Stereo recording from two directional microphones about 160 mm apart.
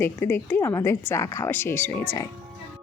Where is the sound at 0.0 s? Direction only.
15° left (ahead or behind).